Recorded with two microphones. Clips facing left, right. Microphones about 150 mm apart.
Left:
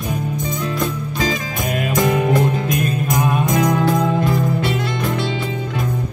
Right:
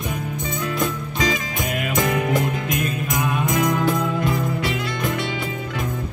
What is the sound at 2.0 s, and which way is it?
Music, 30° left (ahead or behind).